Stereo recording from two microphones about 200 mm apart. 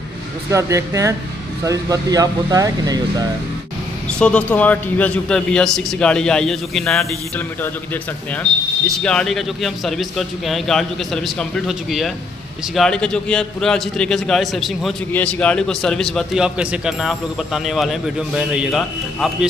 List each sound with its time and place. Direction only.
0.5 s speech: 15° right (ahead or behind)
4.1 s a man's voice: 5° left (ahead or behind)